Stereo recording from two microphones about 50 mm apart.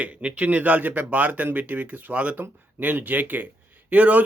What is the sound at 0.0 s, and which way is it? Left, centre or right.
A man's voice, right.